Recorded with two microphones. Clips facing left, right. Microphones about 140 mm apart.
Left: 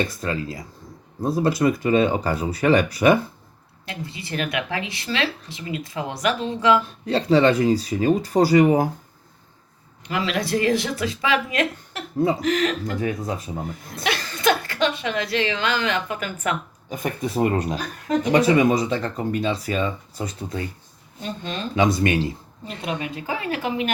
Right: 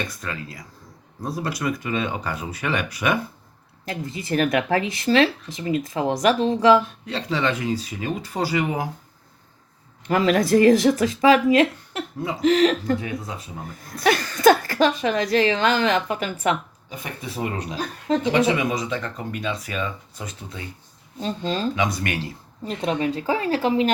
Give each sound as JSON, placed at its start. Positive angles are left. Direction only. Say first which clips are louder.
{"t": 0.2, "sound": "speech", "louder": "left 6 dB", "side_deg": 30}
{"t": 3.8, "sound": "speech", "louder": "right 5 dB", "side_deg": -45}
{"t": 7.0, "sound": "speech", "louder": "left 7 dB", "side_deg": 40}
{"t": 10.1, "sound": "speech", "louder": "right 6 dB", "side_deg": -45}
{"t": 14.0, "sound": "speech", "louder": "right 6 dB", "side_deg": -45}
{"t": 16.9, "sound": "speech", "louder": "left 7 dB", "side_deg": 50}
{"t": 18.3, "sound": "speech", "louder": "left 5 dB", "side_deg": 40}
{"t": 21.2, "sound": "speech", "louder": "right 5 dB", "side_deg": -30}
{"t": 21.8, "sound": "speech", "louder": "left 5 dB", "side_deg": 25}
{"t": 22.6, "sound": "speech", "louder": "right 5 dB", "side_deg": -35}